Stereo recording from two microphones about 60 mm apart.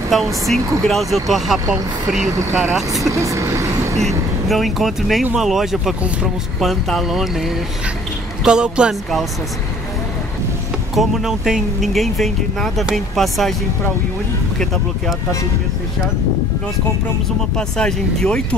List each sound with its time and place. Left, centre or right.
0.1 s speech: centre
3.1 s speech: right
4.5 s speech: centre
8.5 s speech: centre
11.0 s speech: centre
17.6 s speech: centre